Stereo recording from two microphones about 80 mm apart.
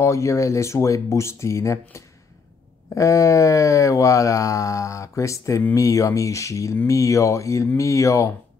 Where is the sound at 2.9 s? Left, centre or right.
Left.